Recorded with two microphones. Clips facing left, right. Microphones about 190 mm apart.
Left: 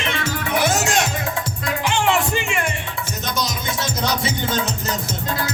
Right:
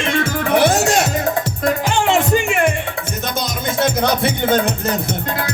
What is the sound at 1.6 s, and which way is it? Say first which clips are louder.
Music: right 3 dB; 45° right (ahead or behind).